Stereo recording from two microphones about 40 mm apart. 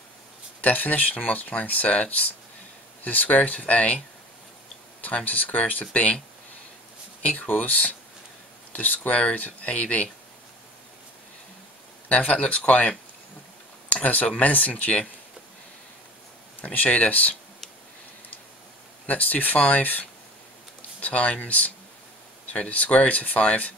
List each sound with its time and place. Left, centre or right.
0.6 s speech: left
5.0 s speech: left
7.3 s speech: left
12.1 s speech: left
14.0 s speech: left
16.6 s speech: left
19.0 s speech: left